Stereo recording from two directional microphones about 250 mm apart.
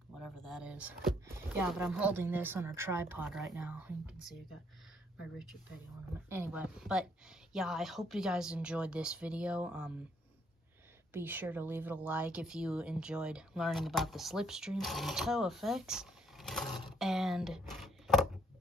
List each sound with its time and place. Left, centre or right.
0.2 s speech: centre
6.2 s speech: centre
11.1 s speech: centre